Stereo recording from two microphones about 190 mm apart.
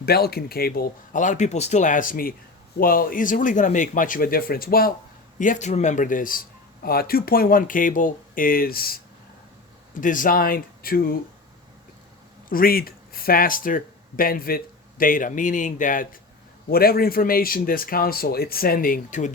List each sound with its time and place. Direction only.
0.0 s speech: 55° left (ahead or behind)
5.4 s speech: 40° left (ahead or behind)
12.5 s speech: 50° left (ahead or behind)